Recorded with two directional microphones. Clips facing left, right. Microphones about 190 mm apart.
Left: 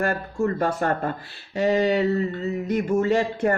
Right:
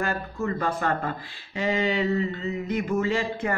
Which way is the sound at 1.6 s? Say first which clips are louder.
Left 5 dB; 40° left (ahead or behind).